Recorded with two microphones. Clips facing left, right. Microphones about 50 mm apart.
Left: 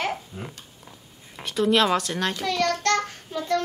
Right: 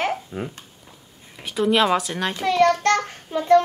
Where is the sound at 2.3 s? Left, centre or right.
Right.